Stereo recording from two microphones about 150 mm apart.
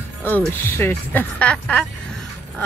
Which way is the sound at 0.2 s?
15° left (ahead or behind).